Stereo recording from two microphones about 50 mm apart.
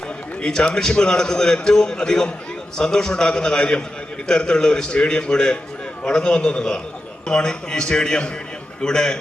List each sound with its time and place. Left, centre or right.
0.4 s a man's voice: centre